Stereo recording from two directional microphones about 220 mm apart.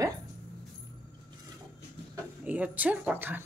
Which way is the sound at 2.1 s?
5° right (ahead or behind).